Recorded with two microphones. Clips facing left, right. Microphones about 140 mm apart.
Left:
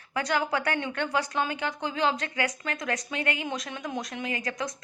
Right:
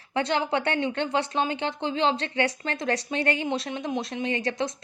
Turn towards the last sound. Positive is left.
turn(degrees=-30)  # may be behind; listen again after turning